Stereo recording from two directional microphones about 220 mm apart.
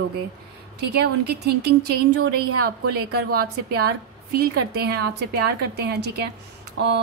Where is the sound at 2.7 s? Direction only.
45° right (ahead or behind).